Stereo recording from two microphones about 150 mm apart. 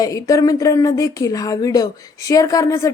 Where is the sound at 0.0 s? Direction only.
20° left (ahead or behind).